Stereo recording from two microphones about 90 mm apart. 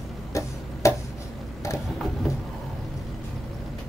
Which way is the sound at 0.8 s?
35° left (ahead or behind).